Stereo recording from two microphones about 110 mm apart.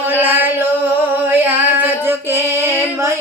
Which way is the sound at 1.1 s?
15° right (ahead or behind).